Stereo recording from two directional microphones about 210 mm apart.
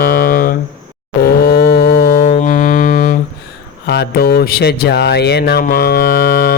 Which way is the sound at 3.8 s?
50° left (ahead or behind).